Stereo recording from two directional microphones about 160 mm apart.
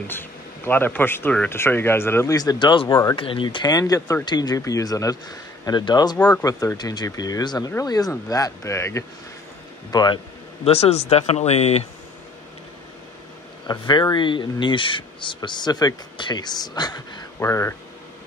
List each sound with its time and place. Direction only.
0.1 s speech: 15° left (ahead or behind); by 11.8 s 40° left (ahead or behind)
13.7 s speech: 25° left (ahead or behind)